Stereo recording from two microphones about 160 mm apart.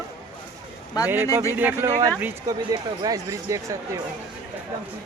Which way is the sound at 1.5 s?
10° right (ahead or behind).